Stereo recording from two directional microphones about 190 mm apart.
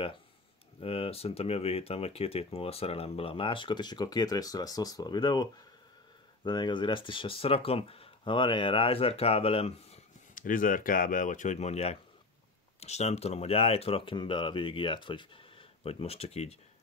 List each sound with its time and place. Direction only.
0.7 s speech: 30° left (ahead or behind)
10.3 s speech: 45° left (ahead or behind)